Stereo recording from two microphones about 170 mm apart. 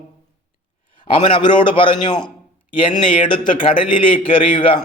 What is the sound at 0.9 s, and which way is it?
A man's voice, 30° left (ahead or behind).